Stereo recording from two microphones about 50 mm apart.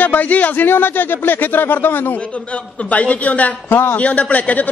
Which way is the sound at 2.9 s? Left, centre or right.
Left.